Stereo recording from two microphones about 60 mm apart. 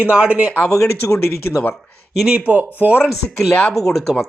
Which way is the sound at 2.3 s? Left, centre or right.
Right.